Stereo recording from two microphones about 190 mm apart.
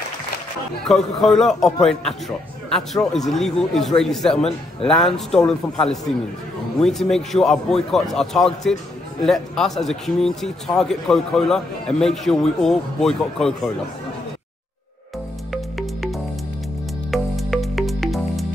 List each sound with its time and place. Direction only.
0.8 s a man's voice: centre (ahead or behind)
4.4 s a man's voice: 30° left (ahead or behind)
4.8 s a man's voice: 5° left (ahead or behind)
15.5 s music: centre (ahead or behind)